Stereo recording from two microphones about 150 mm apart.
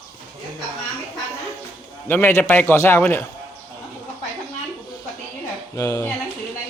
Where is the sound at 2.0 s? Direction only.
15° left (ahead or behind).